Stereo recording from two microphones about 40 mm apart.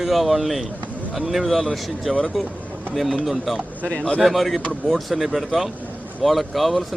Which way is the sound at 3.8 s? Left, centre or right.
Left.